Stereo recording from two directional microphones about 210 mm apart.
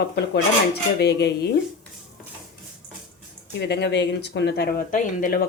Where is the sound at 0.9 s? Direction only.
50° left (ahead or behind).